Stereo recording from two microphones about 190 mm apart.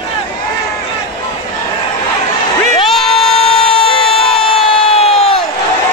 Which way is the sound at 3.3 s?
30° left (ahead or behind).